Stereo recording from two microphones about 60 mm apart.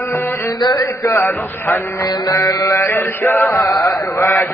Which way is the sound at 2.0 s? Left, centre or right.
Left.